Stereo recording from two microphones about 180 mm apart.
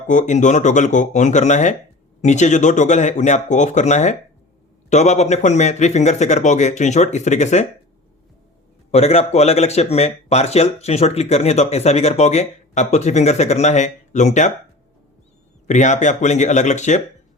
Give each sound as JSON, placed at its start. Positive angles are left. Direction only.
{"t": 0.1, "sound": "speech", "side_deg": 45}
{"t": 8.9, "sound": "speech", "side_deg": 35}
{"t": 15.6, "sound": "speech", "side_deg": 40}